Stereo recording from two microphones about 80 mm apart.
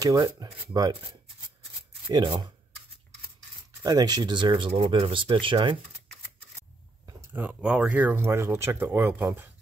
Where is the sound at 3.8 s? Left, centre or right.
Right.